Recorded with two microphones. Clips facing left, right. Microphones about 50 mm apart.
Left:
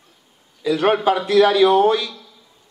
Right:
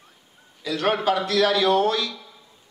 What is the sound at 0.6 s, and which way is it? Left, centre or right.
A man's voice, centre.